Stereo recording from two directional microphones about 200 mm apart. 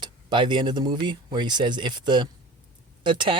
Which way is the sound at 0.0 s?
20° right (ahead or behind).